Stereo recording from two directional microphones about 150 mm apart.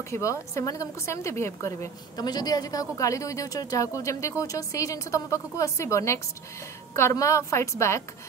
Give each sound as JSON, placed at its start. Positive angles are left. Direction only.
{"t": 0.1, "sound": "a woman's voice", "side_deg": 20}